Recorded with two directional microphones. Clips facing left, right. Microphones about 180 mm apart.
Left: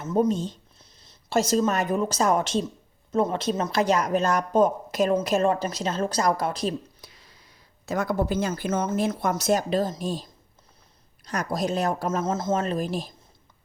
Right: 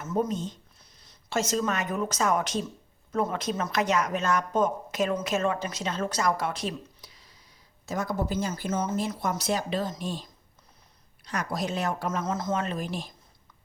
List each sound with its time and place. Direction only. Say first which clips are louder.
0.3 s speech: left 6 dB; 30° left (ahead or behind)
7.9 s speech: left 4 dB; 60° left (ahead or behind)
9.3 s speech: left 6 dB; 45° left (ahead or behind)
11.3 s speech: left 4 dB; 40° left (ahead or behind)
12.2 s speech: left 4 dB; 25° left (ahead or behind)
12.5 s speech: left 4 dB; 35° left (ahead or behind)